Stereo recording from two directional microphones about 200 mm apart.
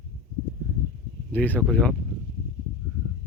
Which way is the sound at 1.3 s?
10° left (ahead or behind).